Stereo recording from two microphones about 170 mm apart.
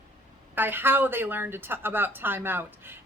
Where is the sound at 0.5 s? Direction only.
10° right (ahead or behind).